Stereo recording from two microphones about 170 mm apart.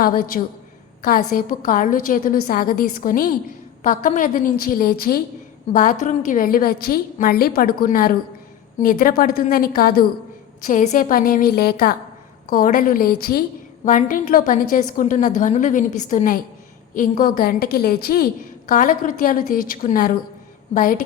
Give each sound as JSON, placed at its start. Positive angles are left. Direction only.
{"t": 0.0, "sound": "a woman's voice", "side_deg": 60}
{"t": 5.7, "sound": "a woman's voice", "side_deg": 50}
{"t": 10.6, "sound": "a woman's voice", "side_deg": 50}
{"t": 18.7, "sound": "a woman's voice", "side_deg": 50}